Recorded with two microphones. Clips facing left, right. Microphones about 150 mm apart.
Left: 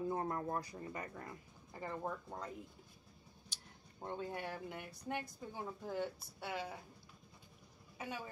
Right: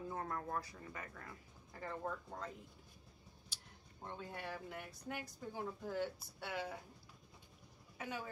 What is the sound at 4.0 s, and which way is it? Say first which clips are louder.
Speech: left 5 dB; 35° left (ahead or behind).